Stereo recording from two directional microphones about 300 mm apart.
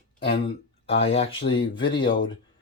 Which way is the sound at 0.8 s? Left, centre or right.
Centre.